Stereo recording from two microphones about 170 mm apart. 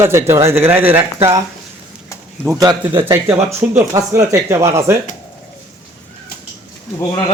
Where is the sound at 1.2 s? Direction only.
30° right (ahead or behind).